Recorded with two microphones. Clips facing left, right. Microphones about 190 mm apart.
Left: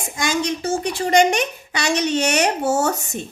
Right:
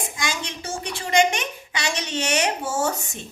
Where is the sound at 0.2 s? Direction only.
40° left (ahead or behind).